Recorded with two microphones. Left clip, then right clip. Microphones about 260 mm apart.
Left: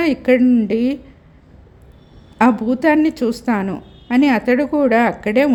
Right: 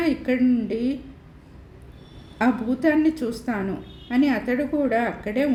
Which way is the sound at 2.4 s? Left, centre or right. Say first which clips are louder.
Left 7 dB; left.